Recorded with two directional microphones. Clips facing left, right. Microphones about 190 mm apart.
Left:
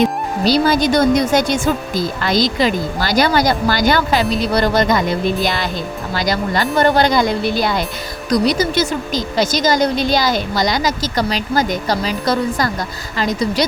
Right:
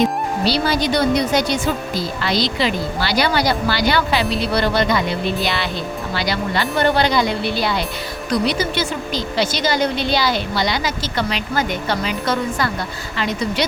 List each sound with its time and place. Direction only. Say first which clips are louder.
0.4 s a woman's voice: left 6 dB; 45° left (ahead or behind)